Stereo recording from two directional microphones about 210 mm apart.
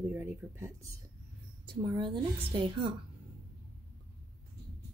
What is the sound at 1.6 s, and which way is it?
Speech, 25° right (ahead or behind).